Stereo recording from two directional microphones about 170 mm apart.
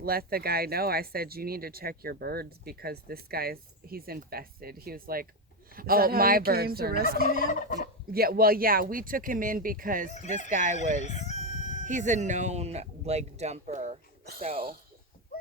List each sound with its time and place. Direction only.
0.0 s speech: 65° right (ahead or behind)
10.1 s speech: 40° left (ahead or behind)
10.5 s speech: 50° right (ahead or behind)
11.0 s crowing: 40° left (ahead or behind)
11.9 s speech: 45° right (ahead or behind)